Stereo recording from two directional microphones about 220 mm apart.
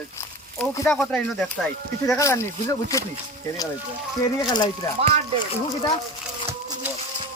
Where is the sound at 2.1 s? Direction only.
15° left (ahead or behind).